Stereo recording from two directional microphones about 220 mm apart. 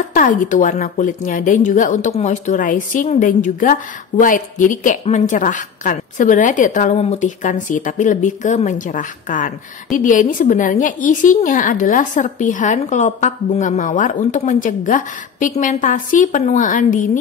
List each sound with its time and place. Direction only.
0.1 s a woman's voice: 35° left (ahead or behind)